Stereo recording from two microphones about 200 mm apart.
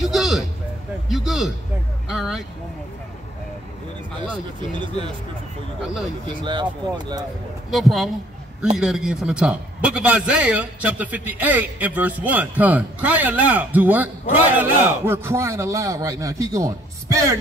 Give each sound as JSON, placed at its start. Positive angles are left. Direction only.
{"t": 0.0, "sound": "a sound", "side_deg": 0}
{"t": 1.0, "sound": "a man's voice", "side_deg": 0}
{"t": 6.4, "sound": "speech", "side_deg": -25}
{"t": 7.7, "sound": "a man's voice", "side_deg": 0}